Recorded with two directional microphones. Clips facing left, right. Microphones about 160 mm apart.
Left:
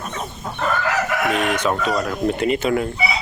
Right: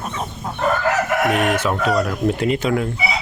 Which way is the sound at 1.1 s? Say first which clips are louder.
Right 3 dB; 50° right (ahead or behind).